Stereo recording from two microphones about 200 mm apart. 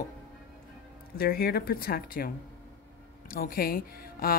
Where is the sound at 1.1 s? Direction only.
50° left (ahead or behind).